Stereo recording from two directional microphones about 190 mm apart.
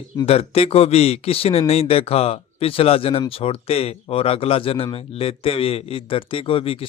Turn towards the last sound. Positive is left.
turn(degrees=30)  # may be behind; listen again after turning